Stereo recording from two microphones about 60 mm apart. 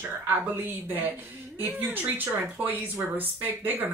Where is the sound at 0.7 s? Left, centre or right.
Right.